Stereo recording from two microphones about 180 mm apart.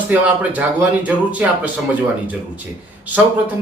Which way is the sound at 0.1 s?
10° right (ahead or behind).